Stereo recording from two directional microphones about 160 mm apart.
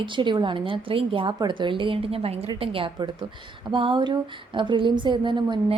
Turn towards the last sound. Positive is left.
turn(degrees=-30)  # may be behind; listen again after turning